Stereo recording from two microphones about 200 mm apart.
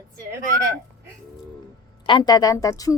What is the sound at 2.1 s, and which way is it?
Speech, 20° left (ahead or behind).